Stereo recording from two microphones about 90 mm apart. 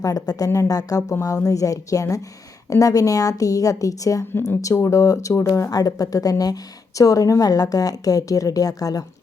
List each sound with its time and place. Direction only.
0.0 s a woman's voice: 40° left (ahead or behind)